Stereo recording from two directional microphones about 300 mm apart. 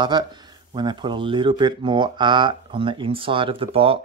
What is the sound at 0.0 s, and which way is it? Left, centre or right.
Speech, centre.